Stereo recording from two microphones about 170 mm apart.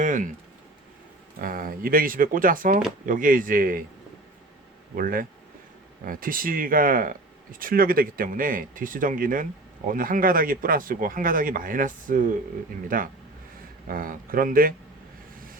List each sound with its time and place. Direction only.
0.0 s a sound: 50° right (ahead or behind)
1.4 s speech: 55° right (ahead or behind)
4.9 s speech: 55° right (ahead or behind)